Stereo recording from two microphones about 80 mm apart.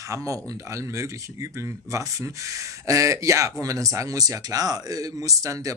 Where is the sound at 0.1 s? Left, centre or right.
Right.